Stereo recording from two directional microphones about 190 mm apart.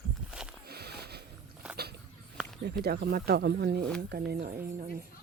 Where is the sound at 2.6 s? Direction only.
60° right (ahead or behind).